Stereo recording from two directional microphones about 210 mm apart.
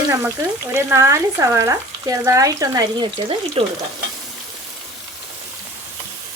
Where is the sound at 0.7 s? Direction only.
15° right (ahead or behind).